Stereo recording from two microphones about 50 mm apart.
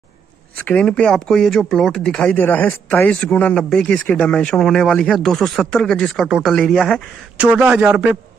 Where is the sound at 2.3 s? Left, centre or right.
Left.